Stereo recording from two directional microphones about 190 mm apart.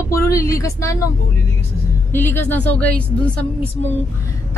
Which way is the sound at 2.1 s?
10° left (ahead or behind).